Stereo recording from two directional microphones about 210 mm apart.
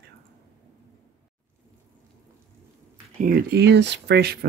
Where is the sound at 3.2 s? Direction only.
40° right (ahead or behind).